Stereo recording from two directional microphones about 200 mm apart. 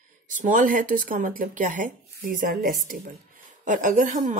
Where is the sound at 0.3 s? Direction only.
40° right (ahead or behind).